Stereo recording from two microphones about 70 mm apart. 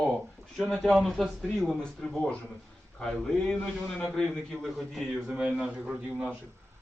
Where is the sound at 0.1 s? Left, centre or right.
Centre.